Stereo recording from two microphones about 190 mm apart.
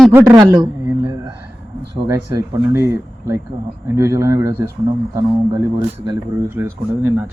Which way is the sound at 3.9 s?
15° right (ahead or behind).